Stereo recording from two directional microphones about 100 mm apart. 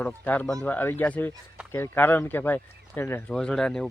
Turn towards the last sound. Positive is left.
turn(degrees=5)  # may be behind; listen again after turning